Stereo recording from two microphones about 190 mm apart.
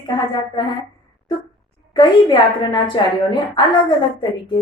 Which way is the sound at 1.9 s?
25° left (ahead or behind).